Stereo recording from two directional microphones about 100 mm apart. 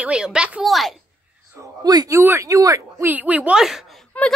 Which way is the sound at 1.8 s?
40° right (ahead or behind).